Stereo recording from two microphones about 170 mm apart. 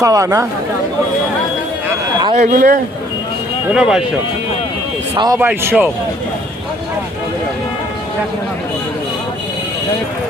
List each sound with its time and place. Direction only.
0.0 s speech: 20° right (ahead or behind)
2.3 s speech: 45° right (ahead or behind)
3.7 s speech: 5° right (ahead or behind)
5.1 s speech: 25° right (ahead or behind)
5.4 s a man's voice: 10° right (ahead or behind)